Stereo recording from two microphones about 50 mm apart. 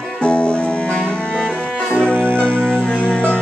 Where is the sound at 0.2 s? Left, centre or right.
Left.